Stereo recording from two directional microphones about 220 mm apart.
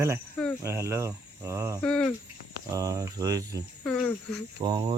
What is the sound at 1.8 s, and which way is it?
Speech, 5° left (ahead or behind).